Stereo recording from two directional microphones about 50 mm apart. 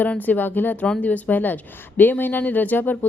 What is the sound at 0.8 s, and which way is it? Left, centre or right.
Speech, left.